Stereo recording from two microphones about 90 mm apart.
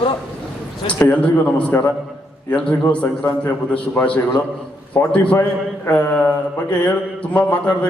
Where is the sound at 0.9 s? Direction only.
15° left (ahead or behind).